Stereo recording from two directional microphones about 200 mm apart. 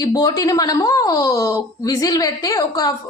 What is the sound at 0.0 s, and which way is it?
A woman's voice, 20° left (ahead or behind).